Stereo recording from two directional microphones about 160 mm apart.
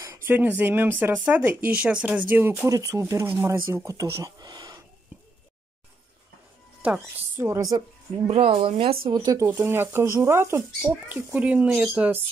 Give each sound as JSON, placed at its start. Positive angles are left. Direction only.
{"t": 0.0, "sound": "speech", "side_deg": -15}
{"t": 5.1, "sound": "a sound", "side_deg": -10}
{"t": 6.8, "sound": "speech", "side_deg": -10}
{"t": 8.3, "sound": "speech", "side_deg": -35}
{"t": 9.0, "sound": "speech", "side_deg": -25}